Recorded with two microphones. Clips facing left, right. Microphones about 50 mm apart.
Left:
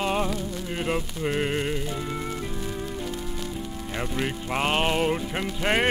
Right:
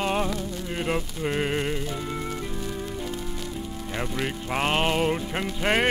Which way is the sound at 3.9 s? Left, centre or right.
Centre.